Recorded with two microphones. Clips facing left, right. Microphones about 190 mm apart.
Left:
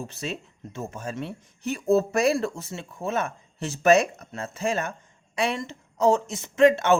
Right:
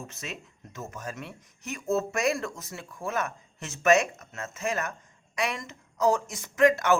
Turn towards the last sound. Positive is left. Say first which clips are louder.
# left 4 dB
turn(degrees=25)  # may be behind; listen again after turning